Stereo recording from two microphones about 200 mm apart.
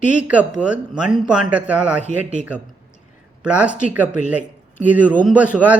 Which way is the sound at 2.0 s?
35° left (ahead or behind).